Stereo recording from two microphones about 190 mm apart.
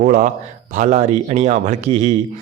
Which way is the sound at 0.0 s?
45° right (ahead or behind).